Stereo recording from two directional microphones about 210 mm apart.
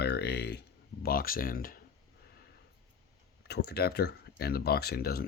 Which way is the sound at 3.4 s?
50° left (ahead or behind).